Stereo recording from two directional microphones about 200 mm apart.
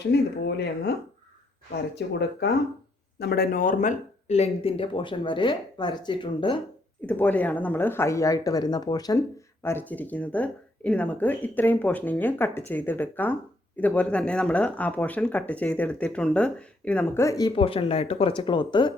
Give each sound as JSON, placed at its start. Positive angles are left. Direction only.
{"t": 0.1, "sound": "speech", "side_deg": 55}
{"t": 7.0, "sound": "speech", "side_deg": 10}